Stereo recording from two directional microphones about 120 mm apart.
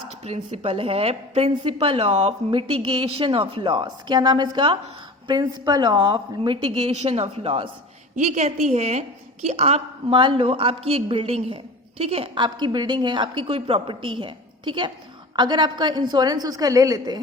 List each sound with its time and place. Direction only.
0.3 s a woman's voice: 60° right (ahead or behind)
2.5 s a woman's voice: 50° right (ahead or behind)
8.1 s a woman's voice: 80° right; by 10.2 s 60° right (ahead or behind)
10.2 s a woman's voice: 45° right (ahead or behind); by 17.2 s 30° right (ahead or behind)